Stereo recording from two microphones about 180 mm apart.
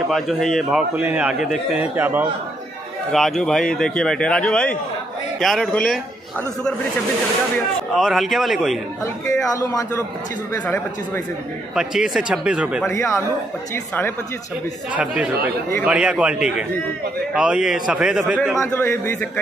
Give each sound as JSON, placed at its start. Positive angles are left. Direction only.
{"t": 0.1, "sound": "a man's voice", "side_deg": 0}
{"t": 3.1, "sound": "a man's voice", "side_deg": 0}
{"t": 7.9, "sound": "a man's voice", "side_deg": 0}
{"t": 9.4, "sound": "a man's voice", "side_deg": 20}
{"t": 11.7, "sound": "a man's voice", "side_deg": -5}
{"t": 12.8, "sound": "a man's voice", "side_deg": 15}
{"t": 15.0, "sound": "a man's voice", "side_deg": -5}
{"t": 18.6, "sound": "a man's voice", "side_deg": 15}